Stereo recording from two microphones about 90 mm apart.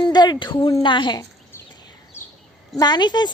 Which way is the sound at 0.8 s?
60° left (ahead or behind).